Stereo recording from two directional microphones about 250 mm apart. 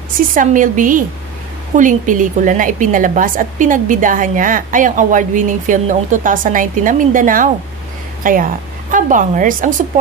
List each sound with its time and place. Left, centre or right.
0.3 s a woman's voice: right